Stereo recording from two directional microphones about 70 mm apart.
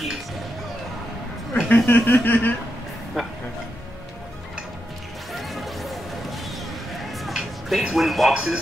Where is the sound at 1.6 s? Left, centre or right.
Left.